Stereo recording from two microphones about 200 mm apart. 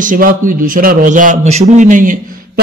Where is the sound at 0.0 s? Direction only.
45° right (ahead or behind).